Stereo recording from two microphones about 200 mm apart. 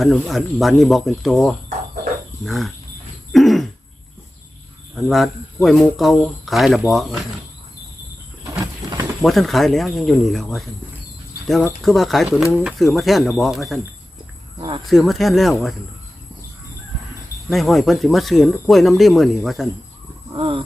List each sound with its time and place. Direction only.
0.0 s speech: centre (ahead or behind)
3.3 s throat clearing: centre (ahead or behind)
4.9 s speech: centre (ahead or behind)
8.5 s a sound: 15° right (ahead or behind)
9.2 s speech: centre (ahead or behind)
11.8 s speech: centre (ahead or behind)
14.8 s speech: centre (ahead or behind)
17.5 s speech: centre (ahead or behind)
20.3 s speech: 25° right (ahead or behind)